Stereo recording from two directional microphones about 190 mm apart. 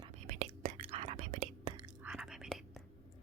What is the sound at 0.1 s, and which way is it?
Whispering, 35° right (ahead or behind).